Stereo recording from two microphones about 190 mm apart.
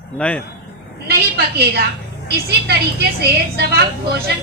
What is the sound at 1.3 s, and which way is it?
A woman's voice, 55° right (ahead or behind).